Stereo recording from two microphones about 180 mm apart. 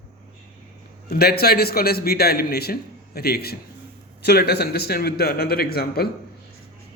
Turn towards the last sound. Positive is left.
turn(degrees=60)  # may be behind; listen again after turning